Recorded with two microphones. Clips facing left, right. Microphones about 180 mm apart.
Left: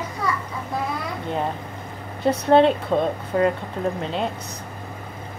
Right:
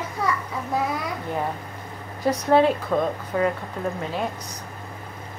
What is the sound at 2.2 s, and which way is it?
Speech, 25° left (ahead or behind).